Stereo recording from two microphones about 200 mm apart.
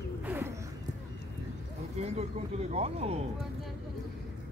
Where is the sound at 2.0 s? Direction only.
35° right (ahead or behind).